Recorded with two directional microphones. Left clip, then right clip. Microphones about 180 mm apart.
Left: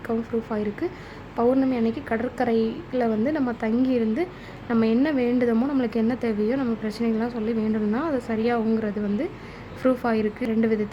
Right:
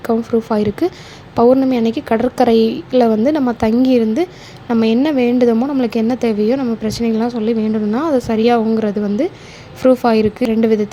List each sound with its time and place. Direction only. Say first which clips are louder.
0.3 s a woman's voice: right 11 dB; 30° right (ahead or behind)
5.5 s a woman's voice: right 7 dB; 15° right (ahead or behind)
5.8 s a woman's voice: right 8 dB; 25° right (ahead or behind)